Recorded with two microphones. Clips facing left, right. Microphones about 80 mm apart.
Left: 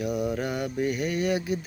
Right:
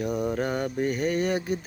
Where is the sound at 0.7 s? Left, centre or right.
Right.